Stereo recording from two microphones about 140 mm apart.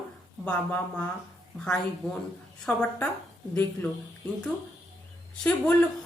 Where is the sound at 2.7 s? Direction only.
10° left (ahead or behind).